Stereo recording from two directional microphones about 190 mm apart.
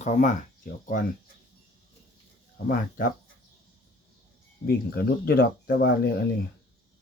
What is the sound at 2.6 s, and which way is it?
Speech, 50° left (ahead or behind).